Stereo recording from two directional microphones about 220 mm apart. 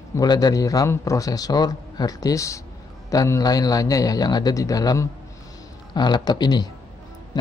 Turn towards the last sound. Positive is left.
turn(degrees=20)  # may be behind; listen again after turning